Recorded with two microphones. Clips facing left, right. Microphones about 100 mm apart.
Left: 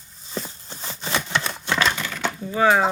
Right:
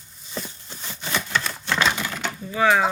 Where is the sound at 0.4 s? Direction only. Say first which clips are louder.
Left 2 dB; 30° left (ahead or behind).